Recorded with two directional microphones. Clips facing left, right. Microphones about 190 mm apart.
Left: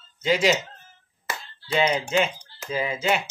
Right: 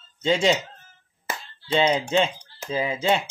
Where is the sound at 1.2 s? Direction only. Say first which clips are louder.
Right 2 dB; 25° right (ahead or behind).